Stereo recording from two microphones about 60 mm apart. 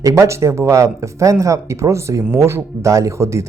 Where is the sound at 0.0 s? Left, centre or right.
Right.